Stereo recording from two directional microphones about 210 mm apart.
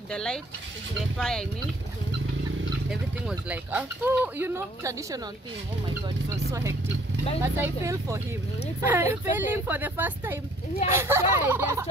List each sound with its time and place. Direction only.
0.1 s speech: 5° left (ahead or behind)
2.9 s speech: 5° right (ahead or behind)
6.3 s speech: 15° right (ahead or behind)